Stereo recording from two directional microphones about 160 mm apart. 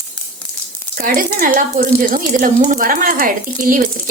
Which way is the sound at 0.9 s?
60° right (ahead or behind).